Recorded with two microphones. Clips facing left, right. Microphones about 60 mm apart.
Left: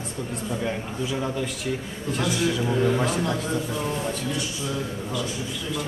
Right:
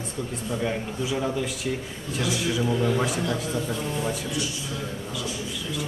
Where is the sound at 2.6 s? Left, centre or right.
Centre.